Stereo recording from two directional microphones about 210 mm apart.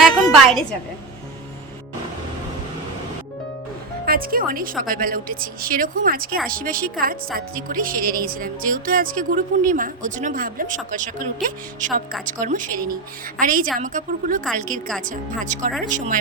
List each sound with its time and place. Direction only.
0.0 s a woman's voice: centre (ahead or behind)
4.0 s a woman's voice: 45° right (ahead or behind)